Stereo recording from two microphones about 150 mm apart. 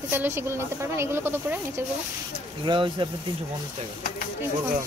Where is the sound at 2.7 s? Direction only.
30° right (ahead or behind).